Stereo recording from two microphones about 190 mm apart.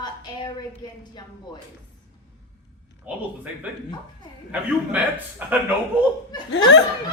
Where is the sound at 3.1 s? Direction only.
10° right (ahead or behind).